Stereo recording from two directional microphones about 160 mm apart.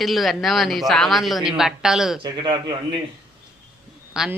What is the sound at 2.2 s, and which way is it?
Speech, 30° right (ahead or behind).